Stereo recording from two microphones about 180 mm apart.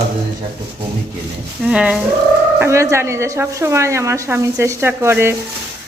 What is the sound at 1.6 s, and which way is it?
Speech, 5° right (ahead or behind).